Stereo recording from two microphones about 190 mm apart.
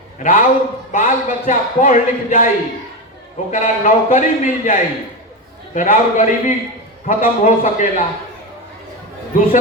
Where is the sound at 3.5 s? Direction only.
40° left (ahead or behind).